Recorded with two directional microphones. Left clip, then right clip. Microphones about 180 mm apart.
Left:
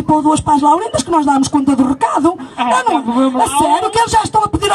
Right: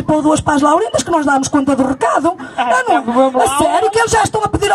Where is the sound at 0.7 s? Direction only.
15° left (ahead or behind).